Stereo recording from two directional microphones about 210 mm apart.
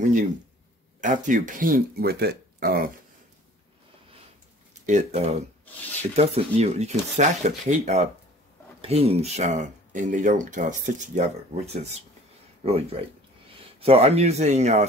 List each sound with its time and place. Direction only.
1.0 s speech: 40° right (ahead or behind)
4.8 s speech: 35° right (ahead or behind)